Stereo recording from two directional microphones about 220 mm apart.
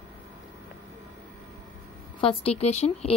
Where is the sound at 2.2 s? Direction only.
25° left (ahead or behind).